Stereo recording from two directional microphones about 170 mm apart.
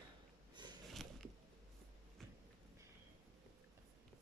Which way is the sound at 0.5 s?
25° right (ahead or behind).